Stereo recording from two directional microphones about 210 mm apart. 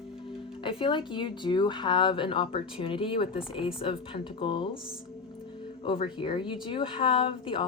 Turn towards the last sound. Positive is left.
turn(degrees=25)  # may be behind; listen again after turning